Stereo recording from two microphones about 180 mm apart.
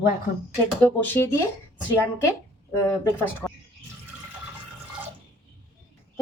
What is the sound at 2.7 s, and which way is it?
Speech, 15° left (ahead or behind).